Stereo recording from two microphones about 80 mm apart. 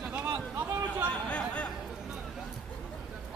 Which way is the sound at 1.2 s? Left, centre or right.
Centre.